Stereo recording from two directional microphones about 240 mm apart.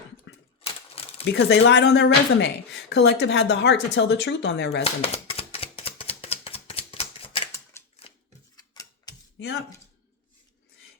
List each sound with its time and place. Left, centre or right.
0.3 s typewriter: left
1.0 s a sound: left
1.3 s speech: left
4.8 s typewriter: left
7.8 s typewriter: centre
9.4 s speech: left